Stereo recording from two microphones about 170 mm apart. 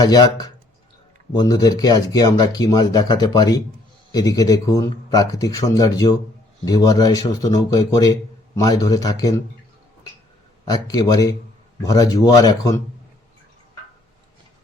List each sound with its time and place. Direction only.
0.0 s speech: 20° left (ahead or behind)
10.7 s speech: 20° left (ahead or behind)